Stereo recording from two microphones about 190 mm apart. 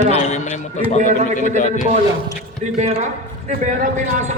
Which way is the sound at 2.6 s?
40° right (ahead or behind).